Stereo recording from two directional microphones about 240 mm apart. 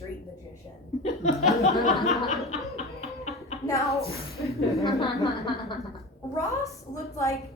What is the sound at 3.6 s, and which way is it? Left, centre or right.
Speech, centre.